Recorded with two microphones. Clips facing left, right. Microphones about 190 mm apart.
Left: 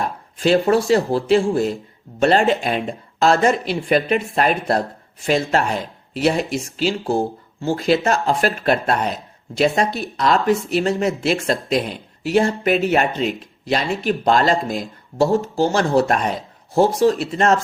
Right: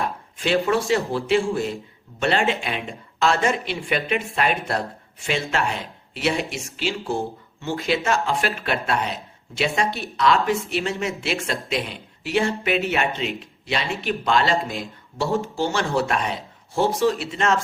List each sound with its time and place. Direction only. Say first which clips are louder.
0.0 s speech: left 6 dB; 40° left (ahead or behind)